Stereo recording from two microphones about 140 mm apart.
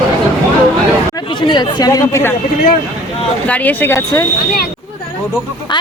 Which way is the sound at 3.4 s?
10° left (ahead or behind).